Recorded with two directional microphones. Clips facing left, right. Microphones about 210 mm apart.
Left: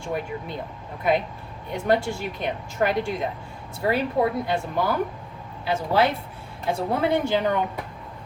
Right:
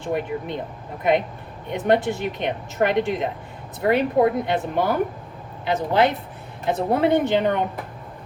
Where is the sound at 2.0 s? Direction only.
20° right (ahead or behind).